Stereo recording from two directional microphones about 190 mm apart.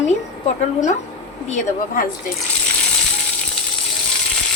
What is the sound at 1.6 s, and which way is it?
Speech, 45° left (ahead or behind).